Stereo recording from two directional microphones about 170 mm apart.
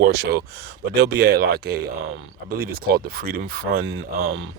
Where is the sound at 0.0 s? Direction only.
70° right (ahead or behind).